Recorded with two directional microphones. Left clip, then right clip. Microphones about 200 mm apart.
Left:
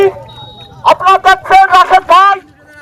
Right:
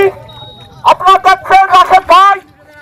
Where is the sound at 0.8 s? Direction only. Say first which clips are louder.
Right 1 dB; 35° right (ahead or behind).